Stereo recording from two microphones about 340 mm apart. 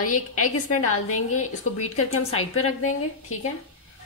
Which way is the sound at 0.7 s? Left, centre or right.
Left.